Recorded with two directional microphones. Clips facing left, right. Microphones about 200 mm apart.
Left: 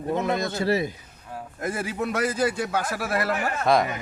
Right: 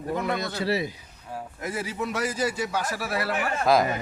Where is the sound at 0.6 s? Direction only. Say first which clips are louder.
Left 2 dB; 50° left (ahead or behind).